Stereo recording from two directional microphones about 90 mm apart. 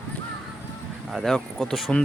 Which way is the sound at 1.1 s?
5° right (ahead or behind).